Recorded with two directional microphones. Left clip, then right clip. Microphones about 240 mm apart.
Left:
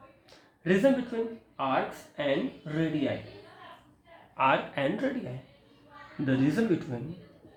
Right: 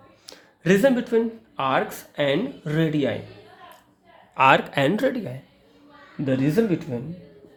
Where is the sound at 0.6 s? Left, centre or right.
Right.